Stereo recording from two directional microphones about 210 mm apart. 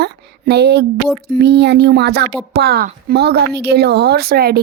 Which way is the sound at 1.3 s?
50° right (ahead or behind).